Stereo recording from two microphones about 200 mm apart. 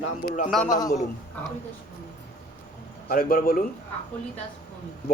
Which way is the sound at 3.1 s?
45° left (ahead or behind).